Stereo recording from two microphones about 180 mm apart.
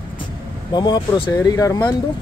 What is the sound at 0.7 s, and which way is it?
Speech, 25° left (ahead or behind).